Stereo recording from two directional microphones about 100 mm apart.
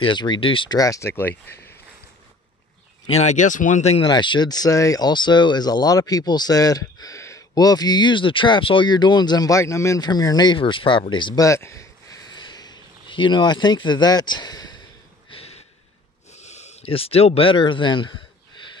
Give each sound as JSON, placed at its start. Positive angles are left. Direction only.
{"t": 0.0, "sound": "speech", "side_deg": 50}
{"t": 0.7, "sound": "speech", "side_deg": 35}
{"t": 1.1, "sound": "speech", "side_deg": 20}
{"t": 4.0, "sound": "speech", "side_deg": 50}
{"t": 10.0, "sound": "speech", "side_deg": 40}
{"t": 11.3, "sound": "a sound", "side_deg": 30}
{"t": 12.3, "sound": "a sound", "side_deg": 45}
{"t": 15.2, "sound": "a sound", "side_deg": 70}
{"t": 16.5, "sound": "speech", "side_deg": 90}